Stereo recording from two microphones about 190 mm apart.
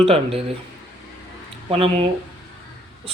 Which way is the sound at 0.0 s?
30° right (ahead or behind).